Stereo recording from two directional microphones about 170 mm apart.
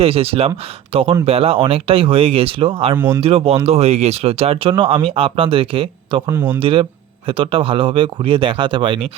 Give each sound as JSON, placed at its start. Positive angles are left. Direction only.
{"t": 0.0, "sound": "speech", "side_deg": -35}
{"t": 2.9, "sound": "speech", "side_deg": -15}
{"t": 3.2, "sound": "speech", "side_deg": -35}
{"t": 6.3, "sound": "speech", "side_deg": -10}
{"t": 6.6, "sound": "speech", "side_deg": -30}